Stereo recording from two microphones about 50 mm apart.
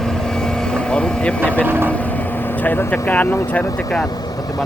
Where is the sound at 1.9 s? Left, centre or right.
Left.